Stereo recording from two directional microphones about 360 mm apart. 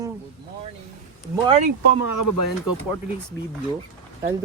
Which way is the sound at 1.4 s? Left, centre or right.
Centre.